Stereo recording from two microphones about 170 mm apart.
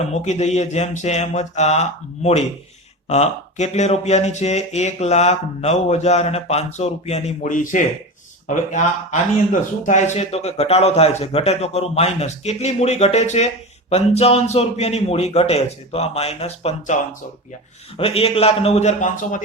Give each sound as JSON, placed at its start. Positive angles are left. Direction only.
{"t": 0.0, "sound": "a man's voice", "side_deg": 40}